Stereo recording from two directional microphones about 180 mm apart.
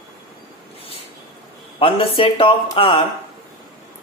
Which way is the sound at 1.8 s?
30° left (ahead or behind).